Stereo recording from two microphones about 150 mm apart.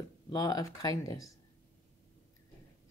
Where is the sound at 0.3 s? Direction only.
25° left (ahead or behind).